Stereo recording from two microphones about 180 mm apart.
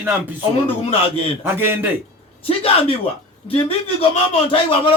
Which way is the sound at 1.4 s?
10° right (ahead or behind).